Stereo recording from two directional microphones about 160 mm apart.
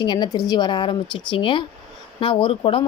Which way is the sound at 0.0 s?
30° left (ahead or behind).